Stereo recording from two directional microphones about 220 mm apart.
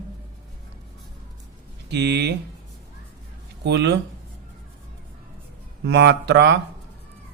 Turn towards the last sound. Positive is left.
turn(degrees=-50)  # may be behind; listen again after turning